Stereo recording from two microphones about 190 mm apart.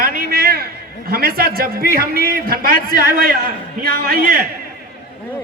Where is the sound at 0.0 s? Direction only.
50° right (ahead or behind).